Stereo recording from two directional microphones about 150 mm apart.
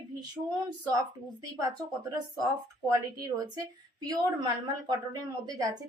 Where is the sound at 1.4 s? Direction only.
25° right (ahead or behind).